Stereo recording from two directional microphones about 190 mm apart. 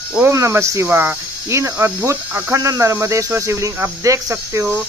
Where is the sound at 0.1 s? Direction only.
10° right (ahead or behind).